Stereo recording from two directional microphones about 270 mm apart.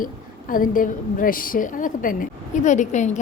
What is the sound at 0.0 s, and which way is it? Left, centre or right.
A woman's voice, left.